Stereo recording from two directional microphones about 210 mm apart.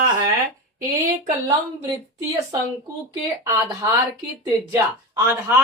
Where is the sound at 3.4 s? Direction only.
15° right (ahead or behind).